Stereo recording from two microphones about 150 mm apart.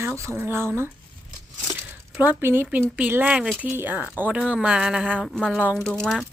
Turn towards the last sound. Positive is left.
turn(degrees=5)  # may be behind; listen again after turning